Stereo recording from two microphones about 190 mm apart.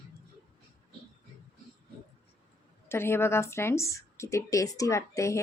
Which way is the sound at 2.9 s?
15° left (ahead or behind).